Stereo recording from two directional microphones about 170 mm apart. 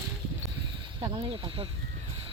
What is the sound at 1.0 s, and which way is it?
Speech, 25° right (ahead or behind).